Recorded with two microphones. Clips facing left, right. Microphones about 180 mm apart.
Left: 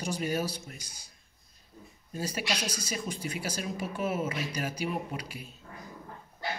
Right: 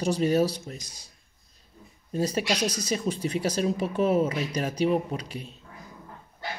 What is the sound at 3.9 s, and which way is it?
Speech, 35° right (ahead or behind).